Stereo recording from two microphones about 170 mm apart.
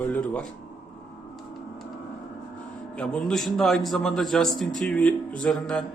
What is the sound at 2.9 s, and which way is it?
A man's voice, 5° left (ahead or behind).